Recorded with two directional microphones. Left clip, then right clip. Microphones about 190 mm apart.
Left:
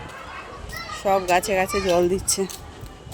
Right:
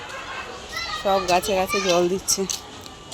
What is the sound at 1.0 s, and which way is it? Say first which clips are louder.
Speech: left 1 dB; 10° left (ahead or behind).